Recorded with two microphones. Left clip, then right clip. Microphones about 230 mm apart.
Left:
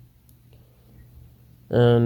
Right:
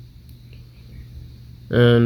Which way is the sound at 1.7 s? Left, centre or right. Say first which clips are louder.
Right 2 dB; left.